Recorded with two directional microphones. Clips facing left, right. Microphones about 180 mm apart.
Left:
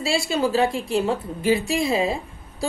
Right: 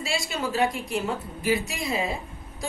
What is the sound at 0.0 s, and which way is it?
A woman's voice, 30° left (ahead or behind).